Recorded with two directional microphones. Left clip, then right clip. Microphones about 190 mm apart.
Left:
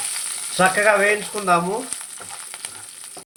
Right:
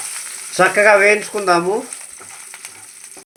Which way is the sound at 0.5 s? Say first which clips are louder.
Right 5 dB; 45° right (ahead or behind).